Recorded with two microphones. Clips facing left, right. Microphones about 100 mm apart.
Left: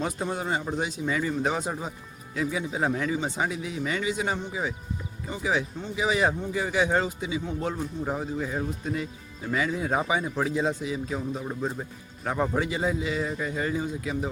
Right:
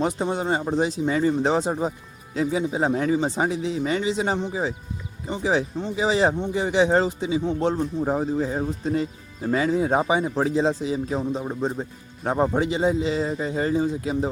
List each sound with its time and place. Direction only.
0.0 s speech: 25° right (ahead or behind)